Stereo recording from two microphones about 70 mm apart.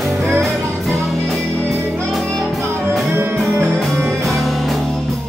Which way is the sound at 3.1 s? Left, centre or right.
Right.